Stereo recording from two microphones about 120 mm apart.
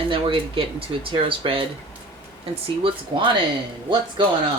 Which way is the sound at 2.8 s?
45° right (ahead or behind).